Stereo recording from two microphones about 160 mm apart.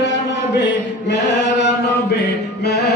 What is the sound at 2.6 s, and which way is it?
Music, 90° left.